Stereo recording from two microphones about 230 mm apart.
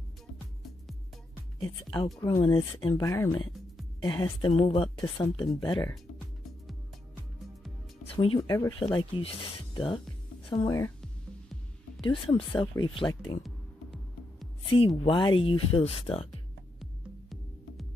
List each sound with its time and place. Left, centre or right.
1.6 s speech: left
8.2 s speech: left
12.0 s speech: left
15.0 s speech: left